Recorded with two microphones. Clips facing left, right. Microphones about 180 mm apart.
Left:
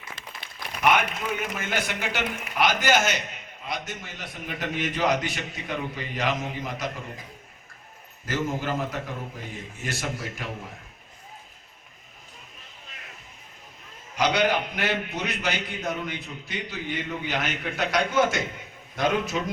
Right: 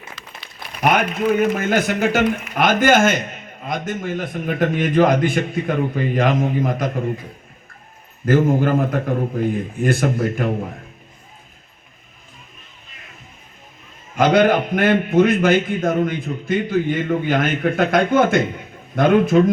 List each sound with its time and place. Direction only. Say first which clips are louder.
0.8 s a sound: right 5 dB; 40° right (ahead or behind)
1.3 s a man's voice: right 13 dB; 50° right (ahead or behind)
8.2 s a man's voice: right 12 dB; 55° right (ahead or behind)
14.2 s a man's voice: right 9 dB; 50° right (ahead or behind)